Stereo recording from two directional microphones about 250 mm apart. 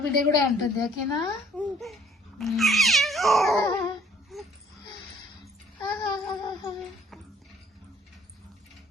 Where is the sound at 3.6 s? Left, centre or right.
Centre.